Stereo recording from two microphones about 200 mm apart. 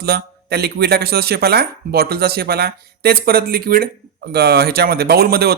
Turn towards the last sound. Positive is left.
turn(degrees=-50)  # may be behind; listen again after turning